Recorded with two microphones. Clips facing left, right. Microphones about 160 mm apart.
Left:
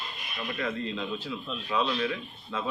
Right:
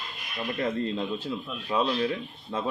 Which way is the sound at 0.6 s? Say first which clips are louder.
Right 4 dB; 35° right (ahead or behind).